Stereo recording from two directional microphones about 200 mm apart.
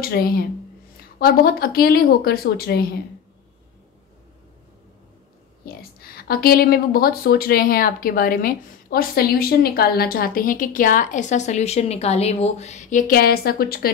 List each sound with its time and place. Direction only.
0.0 s a woman's voice: 45° left (ahead or behind)
5.9 s a woman's voice: 50° left (ahead or behind)